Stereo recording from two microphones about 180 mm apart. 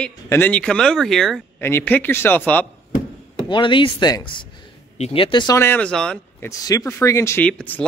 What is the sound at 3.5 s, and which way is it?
Speech, 25° left (ahead or behind).